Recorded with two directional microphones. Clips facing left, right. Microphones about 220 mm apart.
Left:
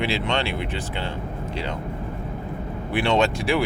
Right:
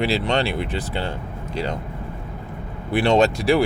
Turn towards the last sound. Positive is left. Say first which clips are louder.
# right 4 dB
turn(degrees=-40)  # may be behind; listen again after turning